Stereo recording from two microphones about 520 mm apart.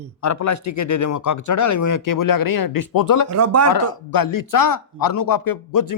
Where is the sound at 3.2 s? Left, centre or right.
Right.